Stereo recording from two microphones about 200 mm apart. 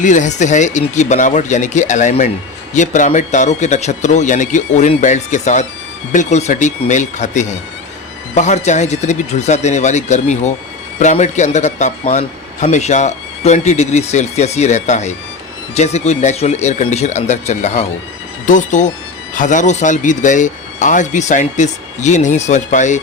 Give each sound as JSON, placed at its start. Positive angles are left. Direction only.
{"t": 0.0, "sound": "a man's voice", "side_deg": 40}